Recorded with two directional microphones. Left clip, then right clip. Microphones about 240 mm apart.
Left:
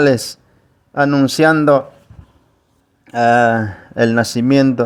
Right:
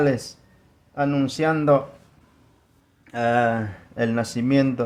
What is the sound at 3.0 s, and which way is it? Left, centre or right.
Speech, left.